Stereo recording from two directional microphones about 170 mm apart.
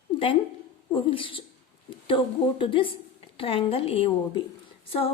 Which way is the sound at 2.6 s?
30° left (ahead or behind).